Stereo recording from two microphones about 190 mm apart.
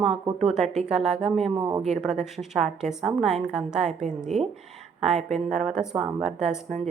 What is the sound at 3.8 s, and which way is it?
A woman's voice, 35° right (ahead or behind).